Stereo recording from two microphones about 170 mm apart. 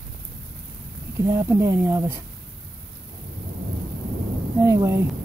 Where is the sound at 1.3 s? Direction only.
20° right (ahead or behind).